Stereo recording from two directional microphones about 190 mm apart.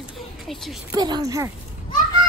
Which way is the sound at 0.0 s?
Centre (ahead or behind).